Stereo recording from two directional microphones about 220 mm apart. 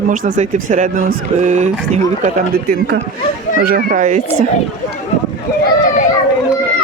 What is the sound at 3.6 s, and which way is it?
Speech, 40° right (ahead or behind).